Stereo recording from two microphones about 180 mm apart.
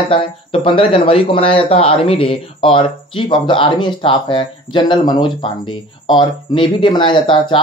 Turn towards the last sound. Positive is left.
turn(degrees=25)  # may be behind; listen again after turning